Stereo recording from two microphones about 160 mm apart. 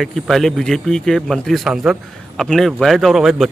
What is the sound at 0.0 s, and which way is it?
Speech, centre (ahead or behind).